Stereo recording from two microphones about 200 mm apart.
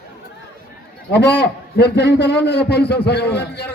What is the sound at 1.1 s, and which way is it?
A man's voice, 55° left (ahead or behind).